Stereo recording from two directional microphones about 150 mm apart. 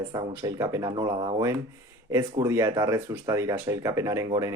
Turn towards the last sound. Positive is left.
turn(degrees=-20)  # may be behind; listen again after turning